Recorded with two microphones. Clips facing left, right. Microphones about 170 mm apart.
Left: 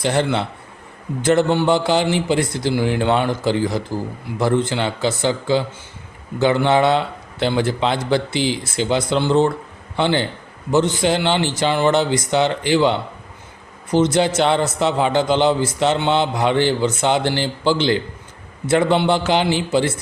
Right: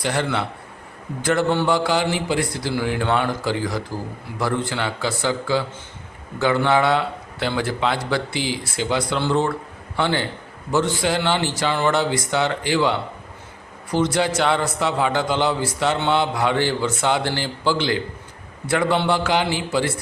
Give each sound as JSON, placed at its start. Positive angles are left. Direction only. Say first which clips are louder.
{"t": 0.0, "sound": "a man's voice", "louder": "left 4 dB", "side_deg": 25}